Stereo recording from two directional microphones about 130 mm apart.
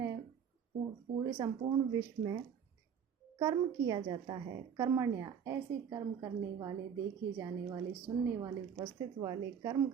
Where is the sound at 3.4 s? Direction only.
25° right (ahead or behind).